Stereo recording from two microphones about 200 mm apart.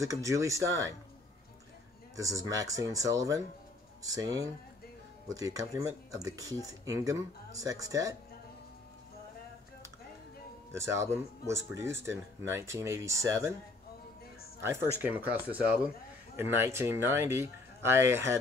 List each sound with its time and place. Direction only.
0.0 s speech: 15° right (ahead or behind)
2.1 s speech: 15° right (ahead or behind)
10.7 s speech: 15° right (ahead or behind)
14.6 s speech: 10° right (ahead or behind)